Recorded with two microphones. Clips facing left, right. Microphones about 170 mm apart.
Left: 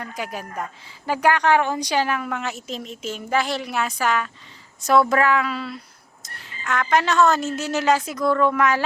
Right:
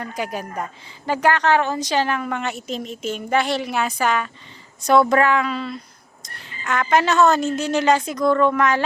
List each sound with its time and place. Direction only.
0.0 s a woman's voice: centre (ahead or behind)